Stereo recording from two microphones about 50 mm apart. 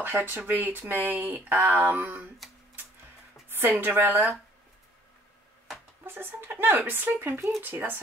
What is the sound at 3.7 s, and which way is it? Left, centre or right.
Speech, right.